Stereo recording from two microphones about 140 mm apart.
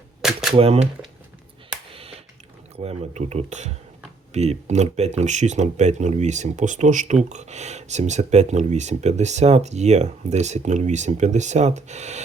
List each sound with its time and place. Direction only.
0.2 s typewriter: 5° right (ahead or behind)
0.5 s speech: 45° right (ahead or behind)
2.0 s a sound: 45° right (ahead or behind)
2.7 s speech: 50° right (ahead or behind)